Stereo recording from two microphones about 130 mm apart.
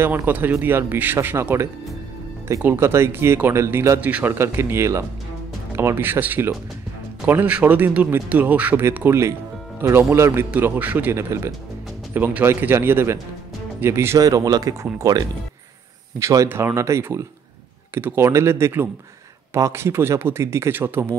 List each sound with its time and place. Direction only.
0.0 s speech: 15° right (ahead or behind)